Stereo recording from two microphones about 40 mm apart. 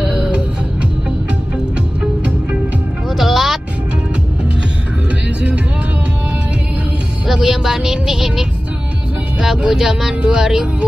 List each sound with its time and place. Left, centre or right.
0.0 s music: centre
3.1 s music: centre
7.2 s music: centre
9.7 s music: centre